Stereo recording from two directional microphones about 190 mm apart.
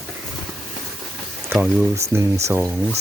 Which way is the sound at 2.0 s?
15° right (ahead or behind).